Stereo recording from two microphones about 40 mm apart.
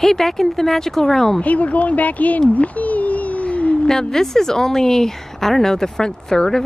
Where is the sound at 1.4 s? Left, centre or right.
Left.